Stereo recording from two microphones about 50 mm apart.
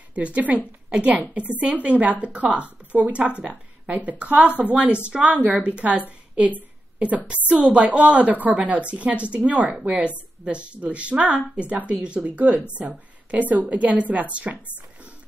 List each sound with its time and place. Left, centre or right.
0.1 s a woman's voice: right
7.5 s a woman's voice: right